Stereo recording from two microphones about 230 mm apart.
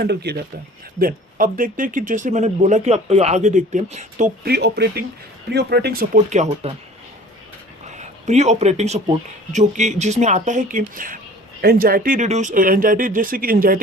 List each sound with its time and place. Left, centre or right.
0.0 s speech: right
4.5 s speech: right
7.9 s a sound: right
9.5 s speech: right